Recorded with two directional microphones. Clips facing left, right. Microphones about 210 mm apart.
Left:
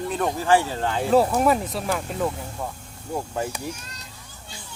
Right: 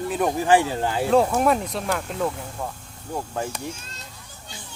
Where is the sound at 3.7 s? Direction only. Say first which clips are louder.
Left 1 dB; 25° right (ahead or behind).